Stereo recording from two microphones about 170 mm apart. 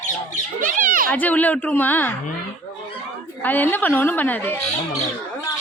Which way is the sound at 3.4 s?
10° left (ahead or behind).